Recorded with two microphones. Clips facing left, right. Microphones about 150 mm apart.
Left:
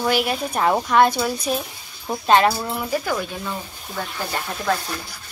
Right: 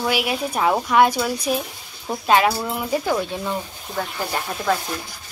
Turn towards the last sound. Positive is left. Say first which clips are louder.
# right 1 dB
turn(degrees=-5)  # may be behind; listen again after turning